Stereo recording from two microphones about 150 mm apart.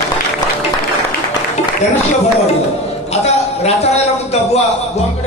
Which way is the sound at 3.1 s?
45° left (ahead or behind).